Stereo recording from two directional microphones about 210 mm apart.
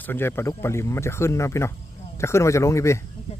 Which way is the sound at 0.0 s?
10° left (ahead or behind).